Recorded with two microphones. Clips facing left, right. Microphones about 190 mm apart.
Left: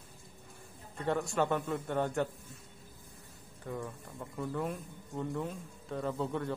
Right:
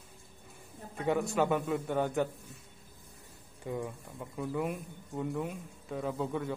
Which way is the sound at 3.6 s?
15° right (ahead or behind).